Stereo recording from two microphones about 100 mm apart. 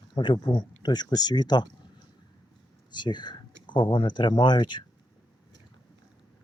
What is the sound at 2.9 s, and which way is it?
Speech, 50° left (ahead or behind).